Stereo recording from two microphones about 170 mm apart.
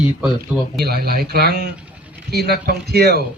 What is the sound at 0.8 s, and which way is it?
A man's voice, 65° right (ahead or behind).